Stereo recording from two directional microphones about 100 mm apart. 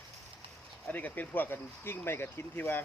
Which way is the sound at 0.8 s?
15° left (ahead or behind).